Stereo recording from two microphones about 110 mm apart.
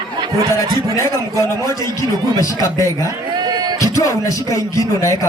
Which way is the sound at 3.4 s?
40° right (ahead or behind).